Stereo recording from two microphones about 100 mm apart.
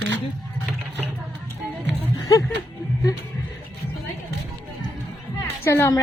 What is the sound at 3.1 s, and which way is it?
Speech, 40° left (ahead or behind).